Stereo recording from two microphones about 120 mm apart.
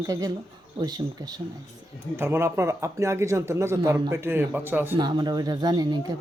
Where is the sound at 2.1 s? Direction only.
20° right (ahead or behind).